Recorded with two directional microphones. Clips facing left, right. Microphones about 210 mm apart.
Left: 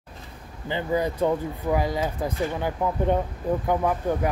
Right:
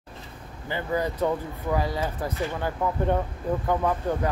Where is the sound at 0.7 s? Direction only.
15° left (ahead or behind).